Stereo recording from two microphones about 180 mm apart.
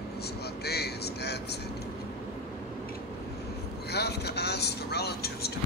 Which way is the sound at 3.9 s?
65° left (ahead or behind).